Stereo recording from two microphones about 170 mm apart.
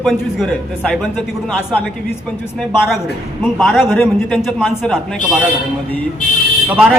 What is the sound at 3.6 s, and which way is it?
A man's voice, centre (ahead or behind).